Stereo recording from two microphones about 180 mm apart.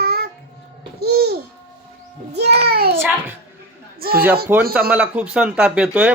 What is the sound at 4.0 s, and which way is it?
Speech, 60° right (ahead or behind).